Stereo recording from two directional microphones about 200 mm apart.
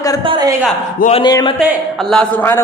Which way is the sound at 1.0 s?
25° left (ahead or behind).